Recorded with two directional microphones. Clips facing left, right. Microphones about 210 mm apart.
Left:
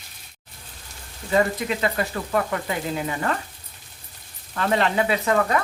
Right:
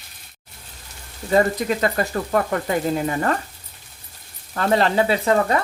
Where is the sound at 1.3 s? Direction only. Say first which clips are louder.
Right 3 dB; 40° right (ahead or behind).